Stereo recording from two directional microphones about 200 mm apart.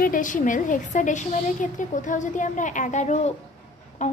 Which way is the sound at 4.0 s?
35° left (ahead or behind).